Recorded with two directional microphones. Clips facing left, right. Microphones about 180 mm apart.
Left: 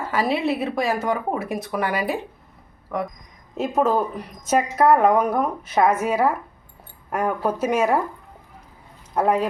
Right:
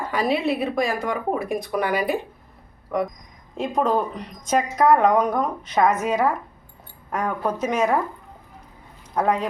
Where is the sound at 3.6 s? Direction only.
5° left (ahead or behind).